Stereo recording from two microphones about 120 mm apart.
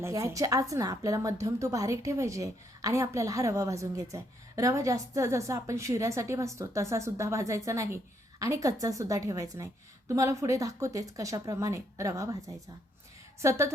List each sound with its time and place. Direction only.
0.0 s a woman's voice: 25° right (ahead or behind)